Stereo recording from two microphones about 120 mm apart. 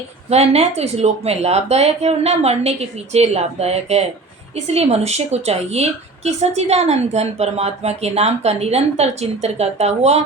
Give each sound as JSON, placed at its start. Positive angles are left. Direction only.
{"t": 0.3, "sound": "a woman's voice", "side_deg": -60}